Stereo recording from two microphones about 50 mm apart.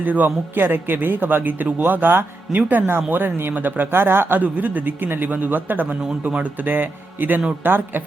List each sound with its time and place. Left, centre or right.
0.0 s a man's voice: right
4.4 s a man's voice: right
6.7 s a man's voice: right